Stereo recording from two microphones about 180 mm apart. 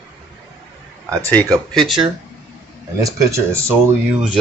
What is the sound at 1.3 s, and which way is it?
Speech, 5° left (ahead or behind).